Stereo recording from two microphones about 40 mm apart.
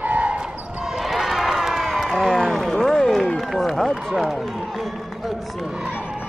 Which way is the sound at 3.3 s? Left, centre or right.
Centre.